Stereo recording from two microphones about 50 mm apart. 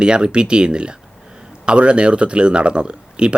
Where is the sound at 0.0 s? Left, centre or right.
Centre.